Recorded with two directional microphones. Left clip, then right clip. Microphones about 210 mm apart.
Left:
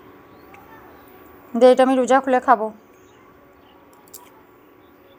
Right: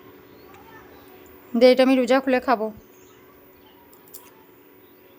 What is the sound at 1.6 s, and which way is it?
Speech, 15° right (ahead or behind).